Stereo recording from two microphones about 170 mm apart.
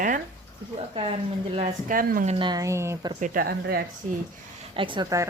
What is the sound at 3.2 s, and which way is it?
Speech, 60° right (ahead or behind).